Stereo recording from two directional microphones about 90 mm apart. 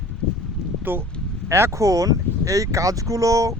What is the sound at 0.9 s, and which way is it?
Speech, 20° right (ahead or behind).